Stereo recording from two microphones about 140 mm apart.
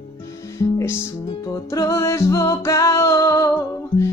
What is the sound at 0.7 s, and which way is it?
Music, 15° left (ahead or behind).